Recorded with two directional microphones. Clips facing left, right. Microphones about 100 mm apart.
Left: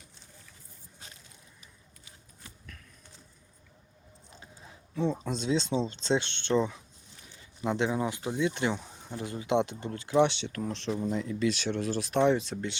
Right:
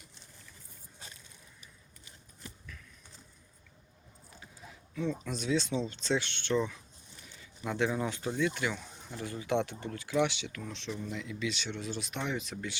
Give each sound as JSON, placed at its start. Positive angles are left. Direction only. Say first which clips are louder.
{"t": 4.9, "sound": "speech", "louder": "left 4 dB", "side_deg": 30}
{"t": 10.5, "sound": "speech", "louder": "left 7 dB", "side_deg": 40}